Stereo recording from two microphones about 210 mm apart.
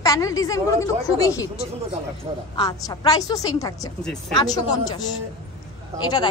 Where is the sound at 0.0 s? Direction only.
15° left (ahead or behind).